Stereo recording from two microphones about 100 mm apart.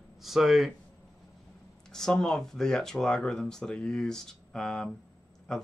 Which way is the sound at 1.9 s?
5° left (ahead or behind).